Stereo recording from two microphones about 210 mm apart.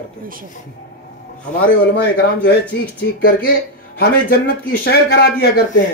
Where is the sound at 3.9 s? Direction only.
50° left (ahead or behind).